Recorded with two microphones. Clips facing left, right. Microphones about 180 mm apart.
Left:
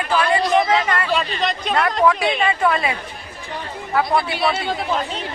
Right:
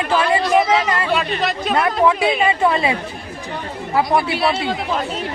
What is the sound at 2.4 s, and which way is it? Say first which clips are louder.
A woman's voice: right 2 dB; 25° right (ahead or behind).